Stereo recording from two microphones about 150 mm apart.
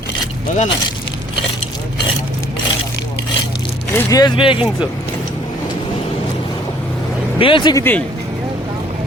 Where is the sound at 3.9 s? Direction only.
25° left (ahead or behind).